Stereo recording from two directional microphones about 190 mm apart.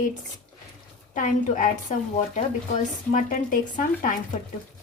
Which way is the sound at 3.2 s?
45° left (ahead or behind).